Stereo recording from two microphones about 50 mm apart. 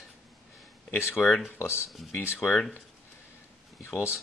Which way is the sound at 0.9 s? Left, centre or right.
Left.